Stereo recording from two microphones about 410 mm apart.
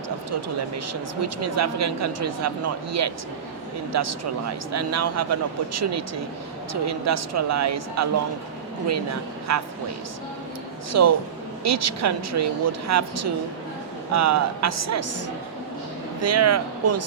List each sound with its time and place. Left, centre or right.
1.2 s speech: right
9.5 s speech: right
10.9 s speech: right
16.2 s speech: right